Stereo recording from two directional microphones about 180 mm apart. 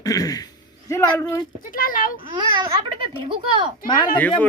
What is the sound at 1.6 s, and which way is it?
Speech, 50° left (ahead or behind).